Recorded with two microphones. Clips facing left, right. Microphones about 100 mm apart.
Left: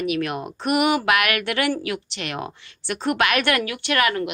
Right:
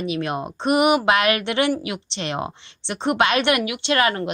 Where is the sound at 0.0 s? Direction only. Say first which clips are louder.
Even; 25° right (ahead or behind).